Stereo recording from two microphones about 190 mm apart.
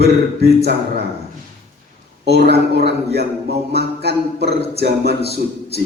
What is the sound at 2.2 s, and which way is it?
Speech, 60° right (ahead or behind).